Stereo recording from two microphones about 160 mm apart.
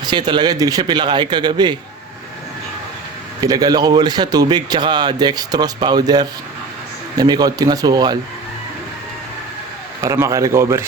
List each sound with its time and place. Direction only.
0.0 s speech: 25° right (ahead or behind)
3.4 s speech: 25° right (ahead or behind)
10.0 s speech: 20° right (ahead or behind)